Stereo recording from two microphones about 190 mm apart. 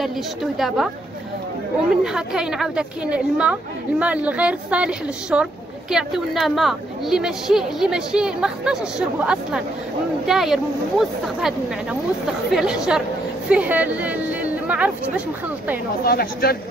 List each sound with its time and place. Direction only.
0.0 s a woman's voice: centre (ahead or behind)
2.0 s a woman's voice: 5° right (ahead or behind)
16.1 s speech: 55° left (ahead or behind)